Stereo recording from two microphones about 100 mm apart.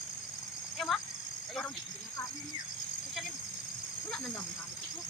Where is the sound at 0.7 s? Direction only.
Centre (ahead or behind).